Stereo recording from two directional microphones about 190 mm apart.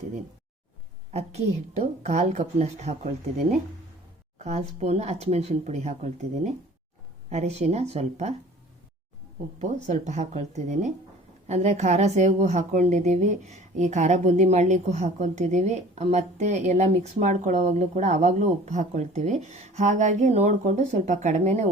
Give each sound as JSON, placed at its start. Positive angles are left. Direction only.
{"t": 1.1, "sound": "a woman's voice", "side_deg": -35}
{"t": 9.6, "sound": "a woman's voice", "side_deg": -40}